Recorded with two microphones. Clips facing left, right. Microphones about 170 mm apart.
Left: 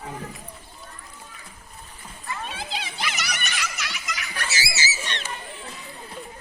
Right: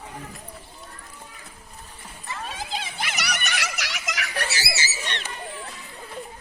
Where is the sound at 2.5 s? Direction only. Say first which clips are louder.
Right 1 dB; 45° right (ahead or behind); by 5.3 s 60° right (ahead or behind).